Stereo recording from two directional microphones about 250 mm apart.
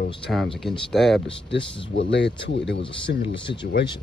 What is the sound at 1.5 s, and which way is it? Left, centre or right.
Speech, left.